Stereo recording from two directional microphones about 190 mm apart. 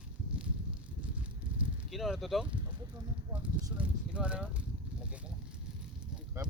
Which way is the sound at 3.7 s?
5° right (ahead or behind).